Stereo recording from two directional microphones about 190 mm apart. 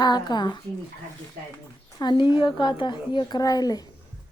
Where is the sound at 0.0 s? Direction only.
20° left (ahead or behind).